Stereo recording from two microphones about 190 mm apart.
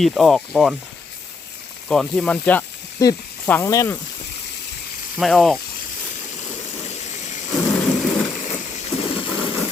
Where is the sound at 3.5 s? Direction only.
15° left (ahead or behind).